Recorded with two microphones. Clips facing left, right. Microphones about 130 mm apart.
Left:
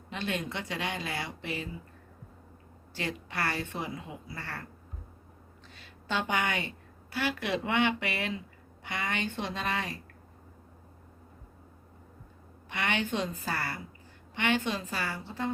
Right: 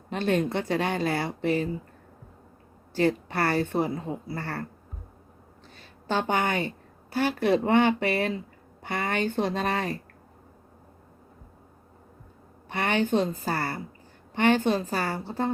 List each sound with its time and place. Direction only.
0.1 s speech: 45° right (ahead or behind)
2.9 s a woman's voice: 40° right (ahead or behind)
5.7 s a woman's voice: 40° right (ahead or behind)
12.6 s a woman's voice: 40° right (ahead or behind)